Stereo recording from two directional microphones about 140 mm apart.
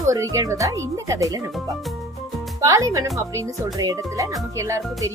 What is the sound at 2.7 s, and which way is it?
Speech, 25° right (ahead or behind).